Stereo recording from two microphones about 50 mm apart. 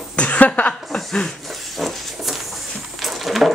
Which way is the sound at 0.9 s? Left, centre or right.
Centre.